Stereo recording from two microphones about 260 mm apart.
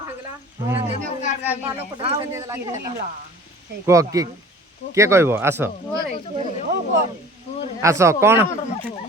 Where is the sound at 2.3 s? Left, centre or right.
Centre.